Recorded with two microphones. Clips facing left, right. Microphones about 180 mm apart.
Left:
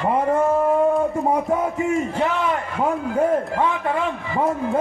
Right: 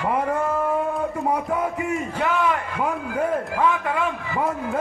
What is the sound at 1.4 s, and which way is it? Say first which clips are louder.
A man's voice: left 3 dB; 25° left (ahead or behind).